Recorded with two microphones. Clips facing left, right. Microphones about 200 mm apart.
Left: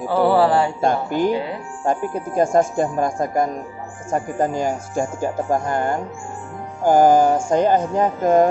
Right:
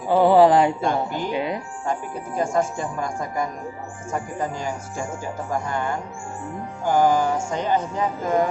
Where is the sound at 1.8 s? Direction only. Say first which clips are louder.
Left 6 dB; 45° left (ahead or behind).